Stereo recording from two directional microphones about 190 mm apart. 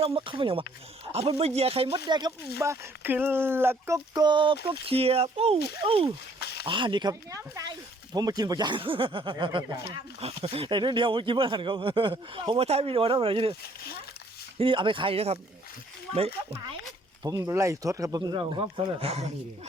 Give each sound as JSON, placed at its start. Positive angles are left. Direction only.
{"t": 0.0, "sound": "speech", "side_deg": -30}
{"t": 6.4, "sound": "a sound", "side_deg": 60}
{"t": 6.7, "sound": "speech", "side_deg": -25}
{"t": 14.6, "sound": "speech", "side_deg": -25}
{"t": 17.2, "sound": "speech", "side_deg": -15}